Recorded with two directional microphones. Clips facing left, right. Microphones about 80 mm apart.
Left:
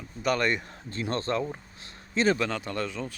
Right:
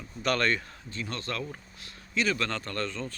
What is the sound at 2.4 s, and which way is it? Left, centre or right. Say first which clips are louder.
Speech: left 2 dB; centre.